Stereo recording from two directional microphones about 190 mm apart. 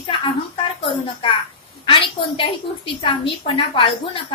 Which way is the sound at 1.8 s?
25° left (ahead or behind).